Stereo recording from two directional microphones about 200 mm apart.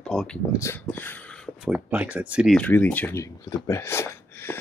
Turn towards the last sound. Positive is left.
turn(degrees=10)  # may be behind; listen again after turning